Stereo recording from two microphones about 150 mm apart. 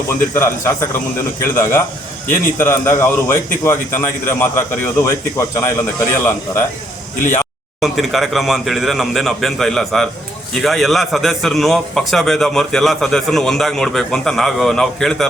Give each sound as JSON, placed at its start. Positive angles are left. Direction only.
{"t": 0.3, "sound": "a man's voice", "side_deg": 15}
{"t": 7.8, "sound": "a man's voice", "side_deg": 0}